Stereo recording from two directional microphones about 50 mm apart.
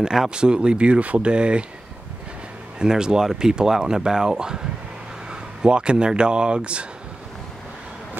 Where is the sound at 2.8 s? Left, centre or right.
Centre.